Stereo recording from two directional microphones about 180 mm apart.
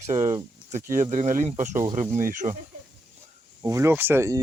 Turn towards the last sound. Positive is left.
turn(degrees=-15)  # may be behind; listen again after turning